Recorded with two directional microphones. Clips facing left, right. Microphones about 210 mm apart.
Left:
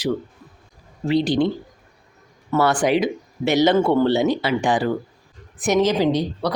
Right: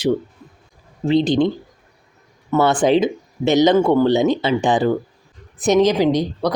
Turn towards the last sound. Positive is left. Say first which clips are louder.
# right 3 dB
turn(degrees=-15)  # may be behind; listen again after turning